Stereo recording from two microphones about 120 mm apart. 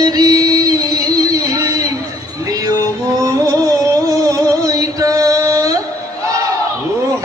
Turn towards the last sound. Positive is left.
turn(degrees=-25)  # may be behind; listen again after turning